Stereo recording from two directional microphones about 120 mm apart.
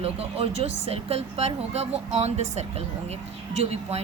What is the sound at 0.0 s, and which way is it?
Speech, 55° right (ahead or behind).